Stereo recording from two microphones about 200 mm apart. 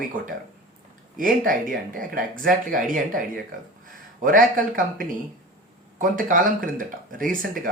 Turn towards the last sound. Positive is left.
turn(degrees=-45)  # may be behind; listen again after turning